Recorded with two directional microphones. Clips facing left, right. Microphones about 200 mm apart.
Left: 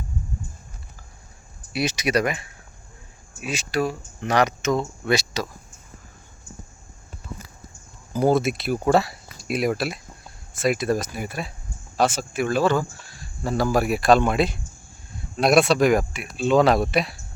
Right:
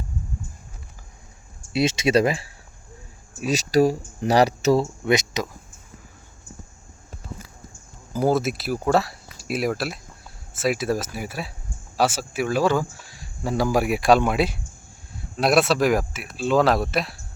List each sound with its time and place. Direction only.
1.7 s speech: 25° right (ahead or behind)
5.0 s speech: 20° right (ahead or behind)
8.1 s speech: 5° right (ahead or behind)